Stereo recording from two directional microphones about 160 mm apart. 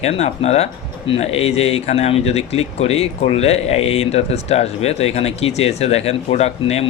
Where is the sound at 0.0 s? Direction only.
40° left (ahead or behind).